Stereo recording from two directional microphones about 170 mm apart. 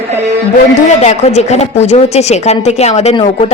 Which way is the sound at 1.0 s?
40° left (ahead or behind).